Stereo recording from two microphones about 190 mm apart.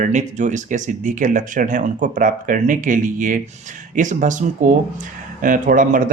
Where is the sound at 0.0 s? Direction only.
40° right (ahead or behind).